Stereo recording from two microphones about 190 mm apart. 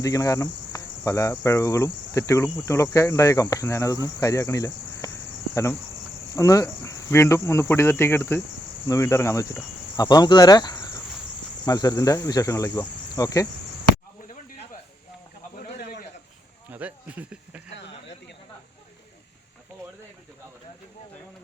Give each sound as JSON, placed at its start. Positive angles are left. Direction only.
{"t": 0.0, "sound": "cricket", "side_deg": 20}
{"t": 6.3, "sound": "cricket", "side_deg": 15}
{"t": 8.9, "sound": "speech", "side_deg": 15}
{"t": 11.6, "sound": "cricket", "side_deg": 20}
{"t": 16.6, "sound": "speech", "side_deg": -10}